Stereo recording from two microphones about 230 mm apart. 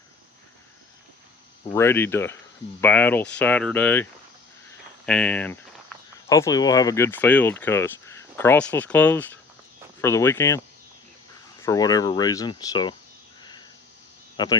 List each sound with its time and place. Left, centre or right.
1.7 s speech: centre
5.0 s speech: centre
11.6 s speech: centre
13.4 s a sound: centre
14.3 s speech: centre